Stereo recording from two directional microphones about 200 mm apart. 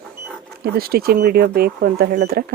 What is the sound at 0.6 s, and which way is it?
Speech, 50° right (ahead or behind).